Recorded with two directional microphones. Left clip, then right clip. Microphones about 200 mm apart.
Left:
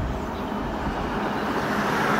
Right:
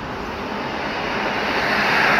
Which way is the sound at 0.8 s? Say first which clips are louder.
Right 6 dB; 65° left (ahead or behind).